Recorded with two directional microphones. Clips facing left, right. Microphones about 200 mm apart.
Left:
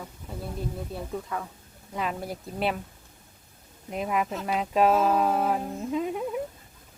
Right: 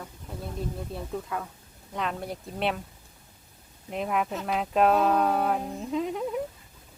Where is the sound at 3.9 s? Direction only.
Centre (ahead or behind).